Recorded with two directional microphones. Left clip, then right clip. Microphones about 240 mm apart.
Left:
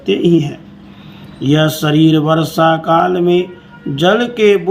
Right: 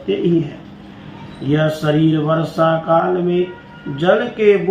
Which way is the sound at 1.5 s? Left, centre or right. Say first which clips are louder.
Left 3 dB; left.